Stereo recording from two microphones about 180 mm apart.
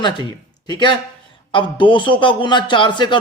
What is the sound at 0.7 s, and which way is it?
A man's voice, 25° left (ahead or behind).